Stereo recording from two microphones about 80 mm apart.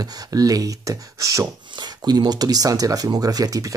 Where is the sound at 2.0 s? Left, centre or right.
Right.